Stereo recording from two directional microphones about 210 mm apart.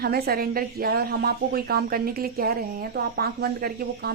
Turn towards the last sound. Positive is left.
turn(degrees=-45)  # may be behind; listen again after turning